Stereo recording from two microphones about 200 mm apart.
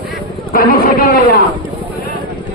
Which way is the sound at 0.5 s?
45° left (ahead or behind).